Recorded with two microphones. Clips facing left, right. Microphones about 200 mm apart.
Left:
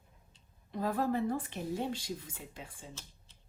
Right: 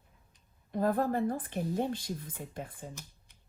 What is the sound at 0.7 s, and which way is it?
A woman's voice, 50° right (ahead or behind).